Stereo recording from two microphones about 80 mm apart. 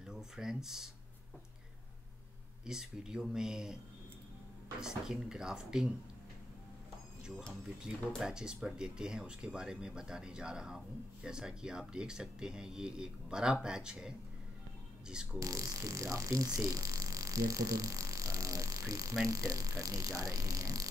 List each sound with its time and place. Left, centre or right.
0.0 s speech: centre
2.6 s speech: centre
4.7 s speech: centre
8.2 s speech: centre
15.3 s speech: right